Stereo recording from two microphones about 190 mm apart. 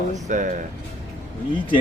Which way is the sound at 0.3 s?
40° right (ahead or behind).